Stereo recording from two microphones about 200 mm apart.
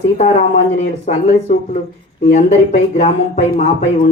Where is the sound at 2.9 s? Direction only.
35° left (ahead or behind).